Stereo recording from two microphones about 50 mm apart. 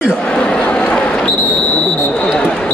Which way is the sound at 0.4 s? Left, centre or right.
Left.